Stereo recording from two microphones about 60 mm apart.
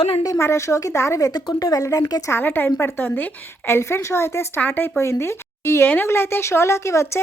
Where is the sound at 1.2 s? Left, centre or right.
Left.